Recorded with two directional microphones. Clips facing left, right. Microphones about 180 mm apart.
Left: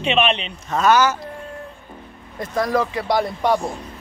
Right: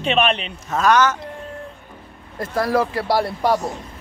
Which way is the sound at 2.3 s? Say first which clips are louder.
Right 1 dB; 5° right (ahead or behind).